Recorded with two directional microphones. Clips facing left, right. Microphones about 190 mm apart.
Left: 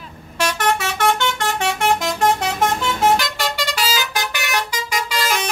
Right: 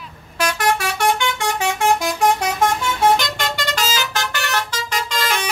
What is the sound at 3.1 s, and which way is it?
Vehicle horn, 5° left (ahead or behind).